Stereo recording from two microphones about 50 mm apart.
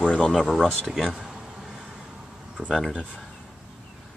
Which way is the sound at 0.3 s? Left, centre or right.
Centre.